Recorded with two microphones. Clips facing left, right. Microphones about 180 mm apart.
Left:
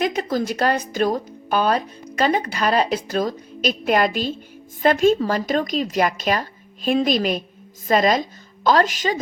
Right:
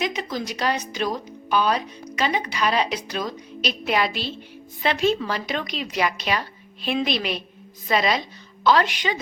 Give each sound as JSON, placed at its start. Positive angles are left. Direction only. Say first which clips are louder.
{"t": 0.0, "sound": "a woman's voice", "louder": "left 5 dB", "side_deg": 50}